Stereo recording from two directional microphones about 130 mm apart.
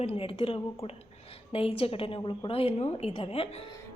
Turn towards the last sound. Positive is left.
turn(degrees=45)  # may be behind; listen again after turning